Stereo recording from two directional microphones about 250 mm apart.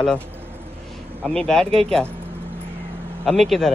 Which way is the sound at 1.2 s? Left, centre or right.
Centre.